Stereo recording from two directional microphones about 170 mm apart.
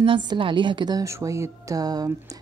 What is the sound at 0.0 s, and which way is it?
Speech, 30° right (ahead or behind).